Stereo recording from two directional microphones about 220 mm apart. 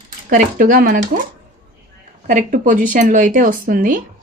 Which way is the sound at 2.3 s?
35° right (ahead or behind).